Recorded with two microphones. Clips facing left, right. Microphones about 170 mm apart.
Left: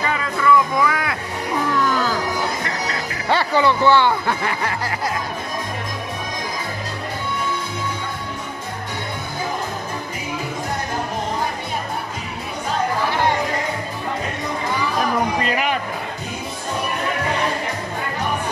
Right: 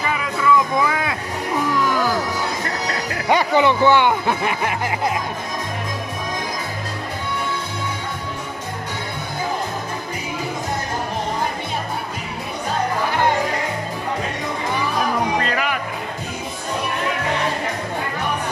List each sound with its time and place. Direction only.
0.0 s music: 10° right (ahead or behind)
0.7 s vehicle: 20° right (ahead or behind)
3.3 s speech: 15° right (ahead or behind)
15.4 s music: 20° left (ahead or behind)